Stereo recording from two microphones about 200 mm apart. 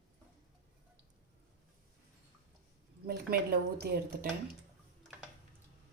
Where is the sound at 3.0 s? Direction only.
50° right (ahead or behind).